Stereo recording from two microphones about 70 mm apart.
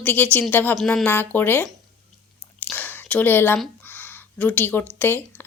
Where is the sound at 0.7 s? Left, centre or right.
Centre.